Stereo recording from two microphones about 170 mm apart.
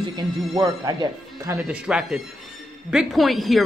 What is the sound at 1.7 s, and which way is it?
A woman's voice, 5° right (ahead or behind).